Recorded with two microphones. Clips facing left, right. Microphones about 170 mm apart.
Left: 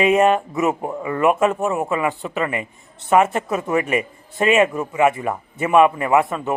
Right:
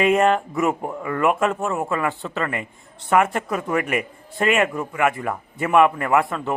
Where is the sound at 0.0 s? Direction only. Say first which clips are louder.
Left 2 dB; 20° left (ahead or behind).